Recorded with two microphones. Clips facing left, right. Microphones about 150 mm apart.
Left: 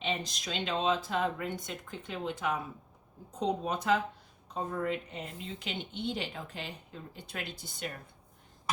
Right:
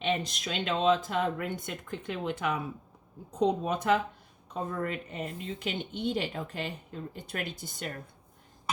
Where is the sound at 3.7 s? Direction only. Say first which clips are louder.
Right 2 dB; 55° right (ahead or behind).